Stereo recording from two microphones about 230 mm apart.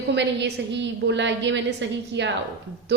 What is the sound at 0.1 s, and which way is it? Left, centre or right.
A woman's voice, right.